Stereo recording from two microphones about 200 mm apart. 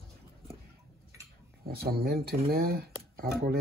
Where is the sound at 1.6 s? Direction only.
50° right (ahead or behind).